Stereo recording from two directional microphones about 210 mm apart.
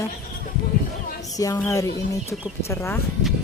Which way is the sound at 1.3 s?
15° left (ahead or behind).